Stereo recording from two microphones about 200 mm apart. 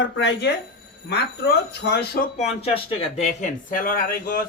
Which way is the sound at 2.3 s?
30° left (ahead or behind).